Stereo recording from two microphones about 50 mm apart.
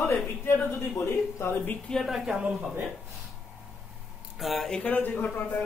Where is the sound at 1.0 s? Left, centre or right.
Left.